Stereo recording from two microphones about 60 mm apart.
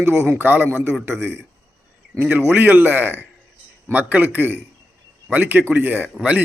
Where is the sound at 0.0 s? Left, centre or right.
Right.